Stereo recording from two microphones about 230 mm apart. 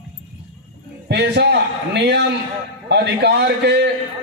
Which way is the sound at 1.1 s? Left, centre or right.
Right.